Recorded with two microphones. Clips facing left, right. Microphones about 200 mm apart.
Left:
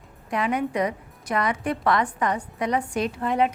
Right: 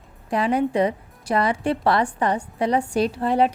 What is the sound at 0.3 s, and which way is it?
A woman's voice, 30° right (ahead or behind).